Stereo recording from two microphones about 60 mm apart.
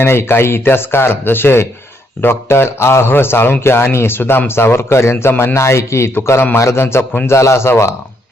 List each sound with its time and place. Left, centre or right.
0.0 s a man's voice: left